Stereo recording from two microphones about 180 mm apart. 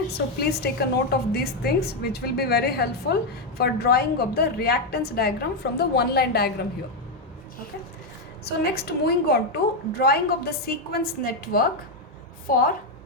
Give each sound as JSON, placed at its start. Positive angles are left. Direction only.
{"t": 0.1, "sound": "a woman's voice", "side_deg": 65}
{"t": 8.4, "sound": "a woman's voice", "side_deg": 60}